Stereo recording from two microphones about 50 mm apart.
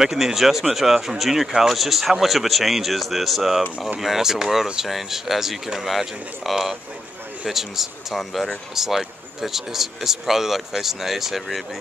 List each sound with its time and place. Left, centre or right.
0.0 s speech: centre